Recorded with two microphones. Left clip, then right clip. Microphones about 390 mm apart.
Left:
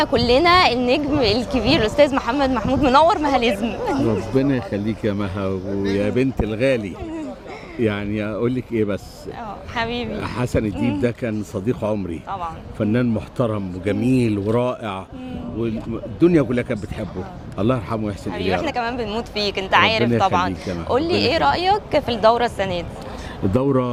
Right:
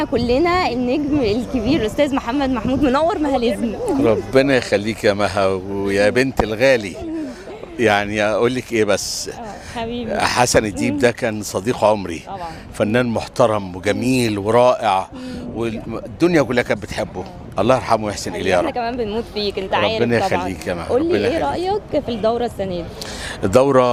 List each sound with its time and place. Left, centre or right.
0.0 s speech: centre
4.4 s speech: right
5.9 s speech: right
9.7 s speech: left
10.2 s speech: right
16.2 s speech: right
18.7 s speech: centre
23.5 s speech: right